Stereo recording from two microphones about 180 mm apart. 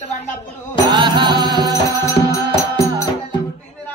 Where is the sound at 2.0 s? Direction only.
15° left (ahead or behind).